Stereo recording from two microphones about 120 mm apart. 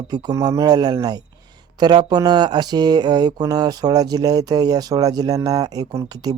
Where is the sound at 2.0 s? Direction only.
35° right (ahead or behind).